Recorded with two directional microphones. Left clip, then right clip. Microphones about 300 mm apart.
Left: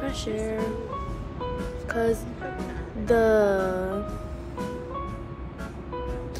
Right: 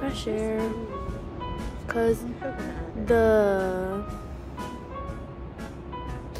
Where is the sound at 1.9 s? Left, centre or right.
Centre.